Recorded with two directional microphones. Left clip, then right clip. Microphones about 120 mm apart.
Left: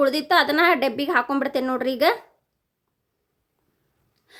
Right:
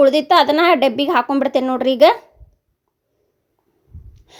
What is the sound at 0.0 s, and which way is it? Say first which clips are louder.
A woman's voice: right 7 dB; 30° right (ahead or behind).